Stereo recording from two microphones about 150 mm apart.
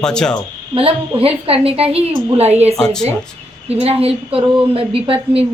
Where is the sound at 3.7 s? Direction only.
40° right (ahead or behind).